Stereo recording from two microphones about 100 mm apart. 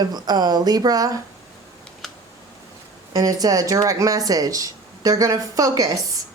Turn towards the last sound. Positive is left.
turn(degrees=-35)  # may be behind; listen again after turning